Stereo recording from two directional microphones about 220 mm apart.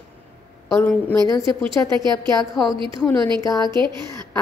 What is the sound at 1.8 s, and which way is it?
Speech, 20° right (ahead or behind).